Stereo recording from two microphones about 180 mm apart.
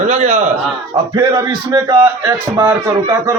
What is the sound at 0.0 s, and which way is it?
Speech, 40° right (ahead or behind).